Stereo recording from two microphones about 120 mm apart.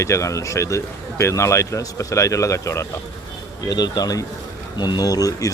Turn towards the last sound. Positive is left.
turn(degrees=30)  # may be behind; listen again after turning